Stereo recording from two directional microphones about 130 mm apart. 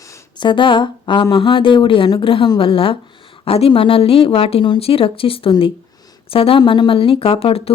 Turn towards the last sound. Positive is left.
turn(degrees=50)  # may be behind; listen again after turning